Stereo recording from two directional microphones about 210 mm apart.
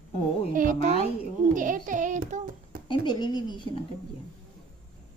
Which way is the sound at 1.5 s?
40° right (ahead or behind).